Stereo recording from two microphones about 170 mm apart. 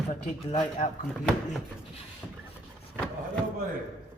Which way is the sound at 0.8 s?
35° left (ahead or behind).